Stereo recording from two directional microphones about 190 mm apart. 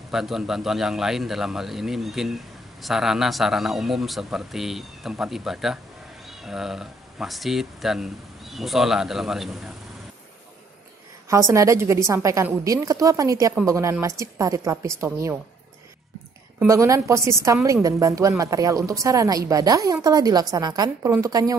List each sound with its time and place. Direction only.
0.1 s a man's voice: centre (ahead or behind)
11.2 s a woman's voice: 15° right (ahead or behind)
16.5 s a woman's voice: 15° right (ahead or behind)